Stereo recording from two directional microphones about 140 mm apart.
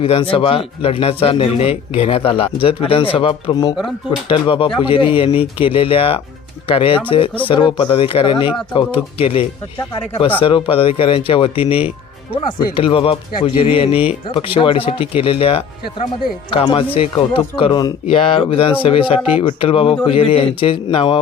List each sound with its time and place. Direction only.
0.0 s speech: 40° left (ahead or behind)
18.1 s speech: 45° left (ahead or behind)